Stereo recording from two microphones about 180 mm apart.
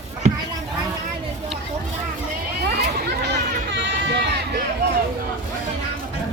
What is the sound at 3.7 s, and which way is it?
Run, 75° right (ahead or behind).